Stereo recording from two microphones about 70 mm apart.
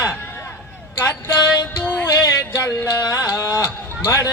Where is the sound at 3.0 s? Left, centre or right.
Left.